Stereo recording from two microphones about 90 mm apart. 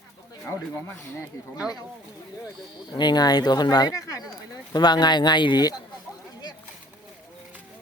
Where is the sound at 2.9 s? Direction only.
50° left (ahead or behind).